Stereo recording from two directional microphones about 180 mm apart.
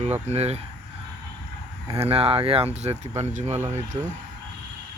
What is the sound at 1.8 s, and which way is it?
Speech, 35° right (ahead or behind).